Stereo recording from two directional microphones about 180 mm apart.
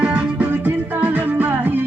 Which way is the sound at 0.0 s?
5° right (ahead or behind).